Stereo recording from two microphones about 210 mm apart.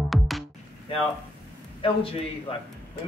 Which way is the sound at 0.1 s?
Centre (ahead or behind).